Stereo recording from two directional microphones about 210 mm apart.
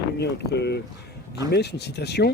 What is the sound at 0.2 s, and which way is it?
Speech, 50° left (ahead or behind).